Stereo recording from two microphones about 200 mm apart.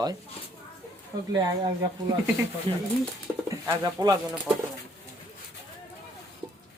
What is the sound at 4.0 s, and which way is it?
Speech, 20° right (ahead or behind).